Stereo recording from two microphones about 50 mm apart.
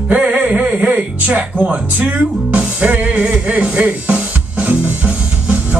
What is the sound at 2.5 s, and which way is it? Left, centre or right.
Music, right.